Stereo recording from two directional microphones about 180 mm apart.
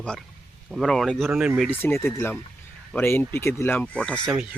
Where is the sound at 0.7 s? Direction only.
Centre (ahead or behind).